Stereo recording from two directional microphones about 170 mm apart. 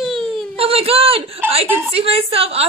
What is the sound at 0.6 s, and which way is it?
A man's voice, 35° right (ahead or behind).